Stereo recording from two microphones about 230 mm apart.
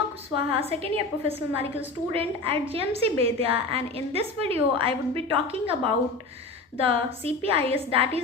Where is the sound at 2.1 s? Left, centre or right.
Right.